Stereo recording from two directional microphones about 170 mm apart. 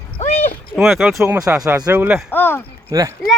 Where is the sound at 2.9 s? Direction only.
20° right (ahead or behind).